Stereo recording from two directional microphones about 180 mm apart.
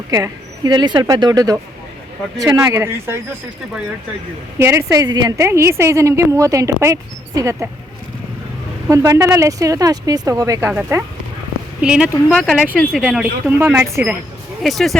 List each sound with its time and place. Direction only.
0.1 s a woman's voice: 20° right (ahead or behind)
4.5 s a woman's voice: 15° right (ahead or behind)
8.9 s a woman's voice: 15° right (ahead or behind)
14.6 s speech: centre (ahead or behind)